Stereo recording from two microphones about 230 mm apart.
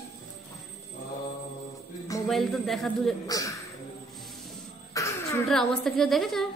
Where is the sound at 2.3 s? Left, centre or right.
Centre.